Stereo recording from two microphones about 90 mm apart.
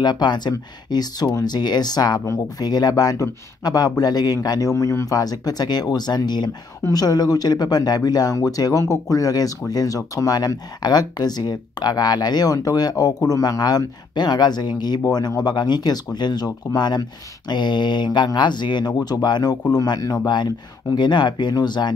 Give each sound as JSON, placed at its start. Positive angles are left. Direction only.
{"t": 0.0, "sound": "speech", "side_deg": 55}
{"t": 20.9, "sound": "speech", "side_deg": 55}